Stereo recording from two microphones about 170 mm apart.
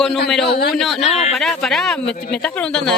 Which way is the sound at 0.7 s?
Centre (ahead or behind).